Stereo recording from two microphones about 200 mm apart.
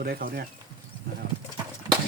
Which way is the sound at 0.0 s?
50° right (ahead or behind).